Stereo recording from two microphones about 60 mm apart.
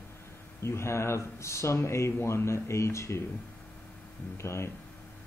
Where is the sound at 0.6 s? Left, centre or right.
Left.